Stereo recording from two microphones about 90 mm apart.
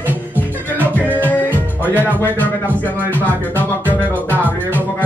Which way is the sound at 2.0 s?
20° left (ahead or behind).